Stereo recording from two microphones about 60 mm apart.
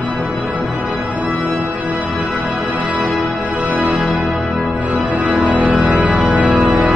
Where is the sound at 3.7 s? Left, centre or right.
Right.